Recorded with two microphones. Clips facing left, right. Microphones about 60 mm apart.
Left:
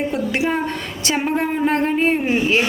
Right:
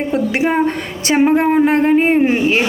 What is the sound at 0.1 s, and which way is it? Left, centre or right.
A woman's voice, right.